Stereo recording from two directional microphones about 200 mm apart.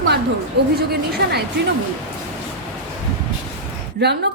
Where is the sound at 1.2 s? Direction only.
55° right (ahead or behind).